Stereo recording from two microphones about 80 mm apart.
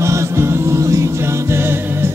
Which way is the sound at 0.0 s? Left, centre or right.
Right.